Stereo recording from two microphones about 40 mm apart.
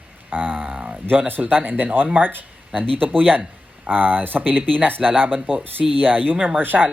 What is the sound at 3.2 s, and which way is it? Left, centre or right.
A man's voice, right.